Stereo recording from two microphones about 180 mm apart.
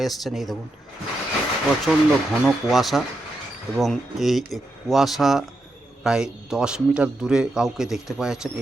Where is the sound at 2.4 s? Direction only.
Centre (ahead or behind).